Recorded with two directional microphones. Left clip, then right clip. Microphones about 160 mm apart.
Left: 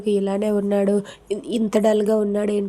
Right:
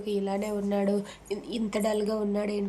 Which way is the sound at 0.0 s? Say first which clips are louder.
Left 9 dB; 35° left (ahead or behind).